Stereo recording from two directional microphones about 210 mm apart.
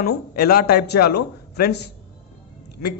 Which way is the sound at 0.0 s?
45° left (ahead or behind).